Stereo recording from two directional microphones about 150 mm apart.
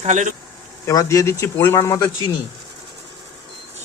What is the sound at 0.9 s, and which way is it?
Speech, 20° left (ahead or behind).